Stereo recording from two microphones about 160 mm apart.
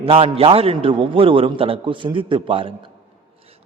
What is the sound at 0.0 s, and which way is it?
A man's voice, 35° right (ahead or behind).